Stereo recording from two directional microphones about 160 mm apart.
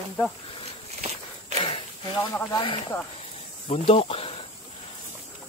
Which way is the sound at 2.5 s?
30° left (ahead or behind).